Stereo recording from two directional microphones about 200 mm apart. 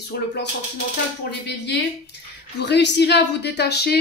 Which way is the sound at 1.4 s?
55° left (ahead or behind).